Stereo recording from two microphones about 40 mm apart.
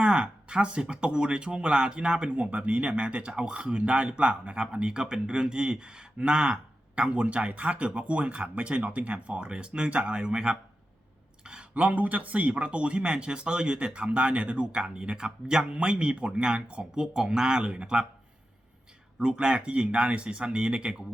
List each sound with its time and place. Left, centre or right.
0.0 s speech: right
2.3 s speech: right
11.7 s speech: right
19.2 s speech: right